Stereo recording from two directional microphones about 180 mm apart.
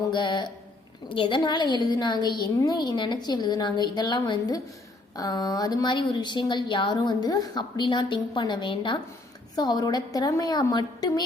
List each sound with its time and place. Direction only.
0.1 s a woman's voice: 25° left (ahead or behind)